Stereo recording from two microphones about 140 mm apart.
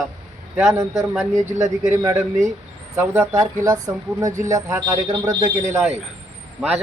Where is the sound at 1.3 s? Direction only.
60° right (ahead or behind).